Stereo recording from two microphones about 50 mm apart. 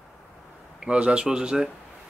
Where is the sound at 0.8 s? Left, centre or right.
Right.